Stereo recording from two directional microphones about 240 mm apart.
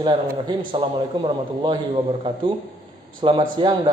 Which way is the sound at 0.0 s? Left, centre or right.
Centre.